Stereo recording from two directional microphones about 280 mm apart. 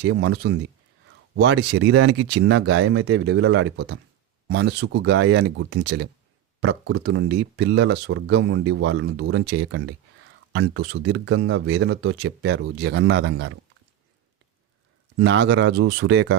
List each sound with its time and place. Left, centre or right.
0.0 s speech: right
15.2 s speech: right